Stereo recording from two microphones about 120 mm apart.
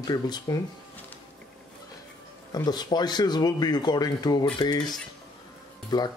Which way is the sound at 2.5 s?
35° left (ahead or behind).